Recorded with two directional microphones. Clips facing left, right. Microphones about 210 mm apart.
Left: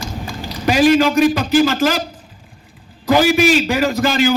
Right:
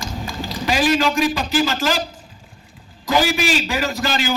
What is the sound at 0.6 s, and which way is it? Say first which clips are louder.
A man's voice: left 6 dB; 45° left (ahead or behind).